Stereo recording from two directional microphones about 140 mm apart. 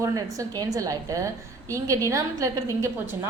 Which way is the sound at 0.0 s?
25° right (ahead or behind).